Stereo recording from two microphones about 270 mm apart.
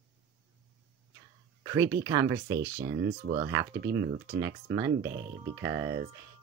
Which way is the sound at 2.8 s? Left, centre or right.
Right.